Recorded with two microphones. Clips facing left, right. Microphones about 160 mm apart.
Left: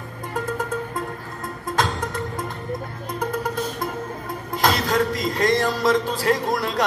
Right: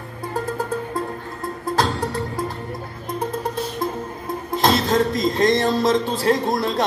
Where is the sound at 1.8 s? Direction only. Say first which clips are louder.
Right 2 dB; 35° right (ahead or behind).